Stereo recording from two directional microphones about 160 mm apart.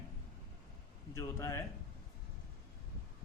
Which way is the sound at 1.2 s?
15° left (ahead or behind).